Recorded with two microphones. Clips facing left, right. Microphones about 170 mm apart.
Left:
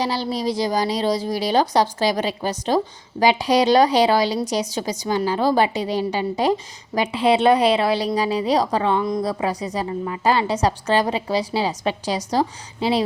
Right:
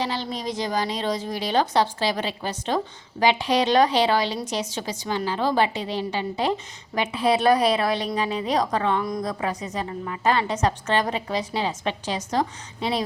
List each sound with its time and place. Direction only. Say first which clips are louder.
0.0 s a woman's voice: left 5 dB; 35° left (ahead or behind)